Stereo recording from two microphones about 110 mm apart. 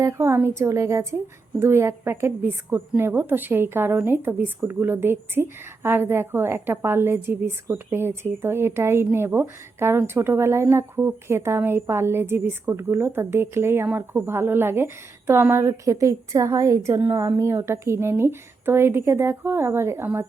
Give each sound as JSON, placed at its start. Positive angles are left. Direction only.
{"t": 0.0, "sound": "a woman's voice", "side_deg": -25}